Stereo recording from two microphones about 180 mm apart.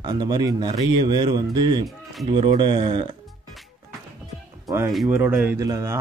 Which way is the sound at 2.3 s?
25° right (ahead or behind).